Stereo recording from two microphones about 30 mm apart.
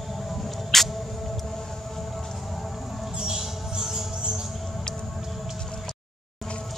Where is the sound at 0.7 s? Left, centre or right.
Centre.